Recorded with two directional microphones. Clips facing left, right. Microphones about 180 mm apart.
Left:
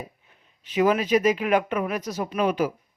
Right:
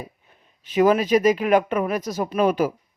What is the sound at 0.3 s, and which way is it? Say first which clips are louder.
A man's voice: right 2 dB; 40° right (ahead or behind).